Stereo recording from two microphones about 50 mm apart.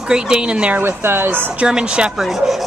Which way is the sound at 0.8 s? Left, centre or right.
Right.